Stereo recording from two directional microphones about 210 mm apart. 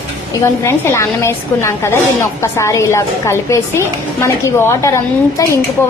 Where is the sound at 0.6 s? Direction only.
10° left (ahead or behind).